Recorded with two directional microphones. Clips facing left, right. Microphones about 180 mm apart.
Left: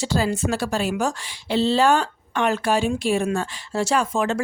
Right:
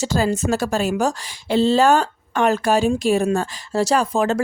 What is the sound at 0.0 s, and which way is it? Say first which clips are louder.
Speech: right 2 dB; 45° right (ahead or behind).